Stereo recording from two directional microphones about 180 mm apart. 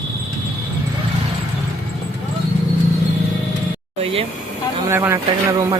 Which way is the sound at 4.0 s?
30° right (ahead or behind).